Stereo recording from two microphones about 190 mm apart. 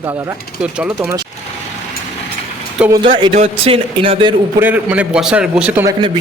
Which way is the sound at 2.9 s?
25° right (ahead or behind).